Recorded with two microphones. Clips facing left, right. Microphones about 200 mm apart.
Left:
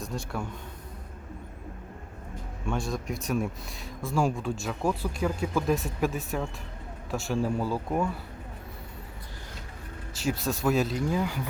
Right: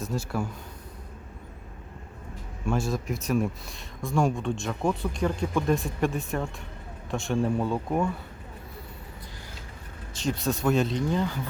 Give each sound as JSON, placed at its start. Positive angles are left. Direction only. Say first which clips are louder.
{"t": 0.0, "sound": "speech", "louder": "right 4 dB", "side_deg": -5}
{"t": 2.6, "sound": "speech", "louder": "right 3 dB", "side_deg": 0}
{"t": 10.2, "sound": "speech", "louder": "right 1 dB", "side_deg": 5}